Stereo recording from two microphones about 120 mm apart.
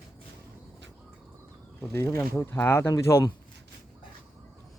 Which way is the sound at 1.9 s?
20° left (ahead or behind).